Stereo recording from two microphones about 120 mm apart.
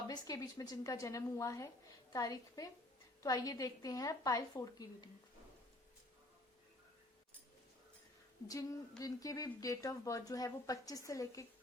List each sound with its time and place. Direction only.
0.1 s a woman's voice: 30° left (ahead or behind)
8.4 s speech: 30° left (ahead or behind)